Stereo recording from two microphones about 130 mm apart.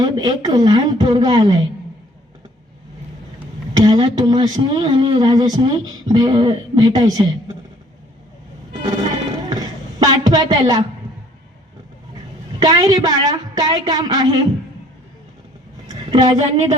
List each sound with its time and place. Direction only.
0.0 s speech: 30° right (ahead or behind)
3.8 s speech: 35° right (ahead or behind)
8.8 s music: 35° right (ahead or behind)
9.5 s a sound: 30° right (ahead or behind)
12.6 s speech: 30° right (ahead or behind)
15.9 s a sound: 35° right (ahead or behind)